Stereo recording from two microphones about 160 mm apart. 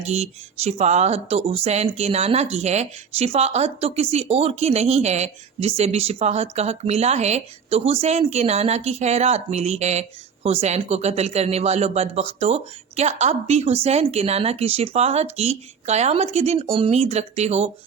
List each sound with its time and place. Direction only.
0.0 s speech: 45° right (ahead or behind)